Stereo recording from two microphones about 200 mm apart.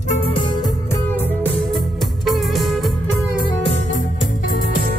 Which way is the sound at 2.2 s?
Centre (ahead or behind).